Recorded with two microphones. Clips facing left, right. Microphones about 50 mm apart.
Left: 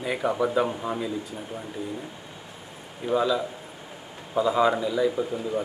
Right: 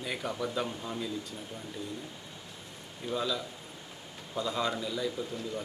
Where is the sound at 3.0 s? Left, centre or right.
Left.